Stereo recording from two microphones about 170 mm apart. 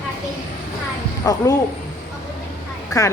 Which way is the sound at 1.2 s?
20° left (ahead or behind).